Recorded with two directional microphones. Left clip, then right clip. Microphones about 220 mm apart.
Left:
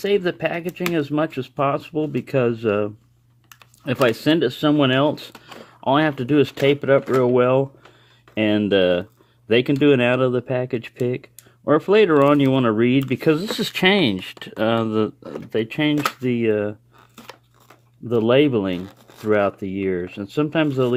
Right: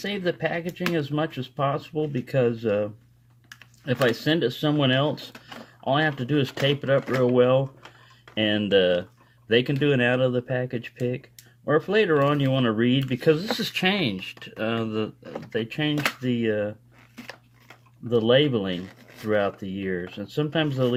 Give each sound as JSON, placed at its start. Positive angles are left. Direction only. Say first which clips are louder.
{"t": 0.0, "sound": "speech", "louder": "left 7 dB", "side_deg": 40}
{"t": 4.0, "sound": "speech", "louder": "left 5 dB", "side_deg": 40}
{"t": 18.1, "sound": "speech", "louder": "left 3 dB", "side_deg": 40}